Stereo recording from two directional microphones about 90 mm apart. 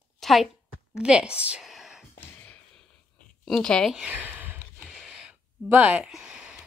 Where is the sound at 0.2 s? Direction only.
Centre (ahead or behind).